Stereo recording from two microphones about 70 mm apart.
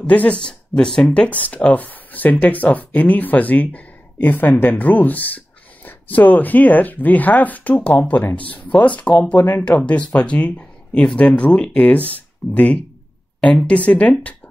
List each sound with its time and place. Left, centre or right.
0.0 s speech: centre